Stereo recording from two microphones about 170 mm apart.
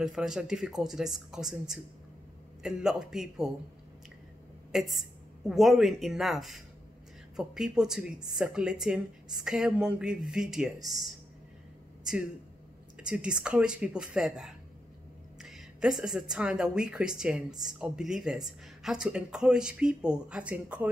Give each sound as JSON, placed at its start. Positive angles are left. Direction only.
{"t": 0.0, "sound": "a woman's voice", "side_deg": -5}
{"t": 4.7, "sound": "a woman's voice", "side_deg": 0}
{"t": 12.0, "sound": "a woman's voice", "side_deg": -5}